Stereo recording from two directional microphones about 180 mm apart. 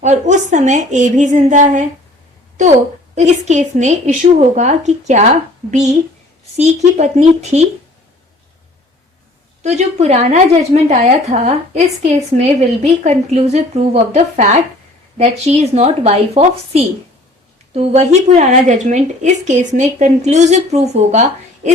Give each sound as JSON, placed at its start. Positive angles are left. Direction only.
{"t": 0.0, "sound": "a woman's voice", "side_deg": -40}
{"t": 3.2, "sound": "a woman's voice", "side_deg": -40}
{"t": 6.6, "sound": "a woman's voice", "side_deg": -35}
{"t": 9.6, "sound": "a woman's voice", "side_deg": -40}